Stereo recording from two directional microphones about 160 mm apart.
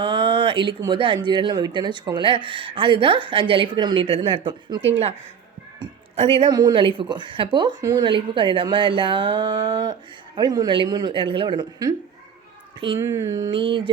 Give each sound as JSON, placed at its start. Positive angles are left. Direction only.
{"t": 0.0, "sound": "speech", "side_deg": -30}
{"t": 6.1, "sound": "speech", "side_deg": -35}
{"t": 6.5, "sound": "speech", "side_deg": -25}
{"t": 13.0, "sound": "speech", "side_deg": -20}
{"t": 13.5, "sound": "speech", "side_deg": -35}